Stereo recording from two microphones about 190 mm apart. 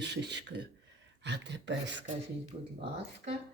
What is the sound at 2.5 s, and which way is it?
Speech, 35° right (ahead or behind).